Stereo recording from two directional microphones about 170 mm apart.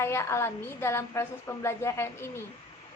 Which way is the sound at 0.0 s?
15° left (ahead or behind).